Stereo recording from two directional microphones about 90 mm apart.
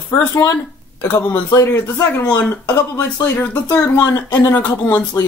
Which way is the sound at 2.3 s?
25° left (ahead or behind).